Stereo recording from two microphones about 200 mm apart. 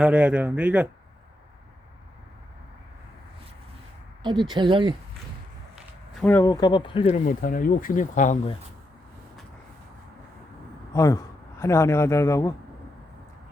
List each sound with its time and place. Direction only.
0.0 s speech: 5° right (ahead or behind)
4.2 s speech: 20° right (ahead or behind)
6.1 s speech: 10° left (ahead or behind)
7.1 s speech: 45° left (ahead or behind)
10.9 s a man's voice: 15° left (ahead or behind)